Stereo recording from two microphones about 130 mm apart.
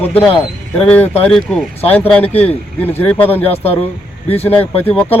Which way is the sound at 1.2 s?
5° left (ahead or behind).